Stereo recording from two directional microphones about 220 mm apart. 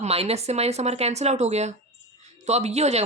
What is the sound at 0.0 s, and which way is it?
Speech, 30° right (ahead or behind).